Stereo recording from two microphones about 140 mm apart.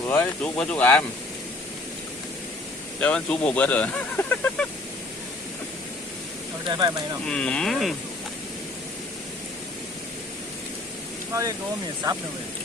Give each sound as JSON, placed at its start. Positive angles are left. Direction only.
{"t": 0.0, "sound": "speech", "side_deg": 15}
{"t": 3.0, "sound": "speech", "side_deg": 10}
{"t": 6.7, "sound": "speech", "side_deg": -35}
{"t": 7.3, "sound": "speech", "side_deg": 5}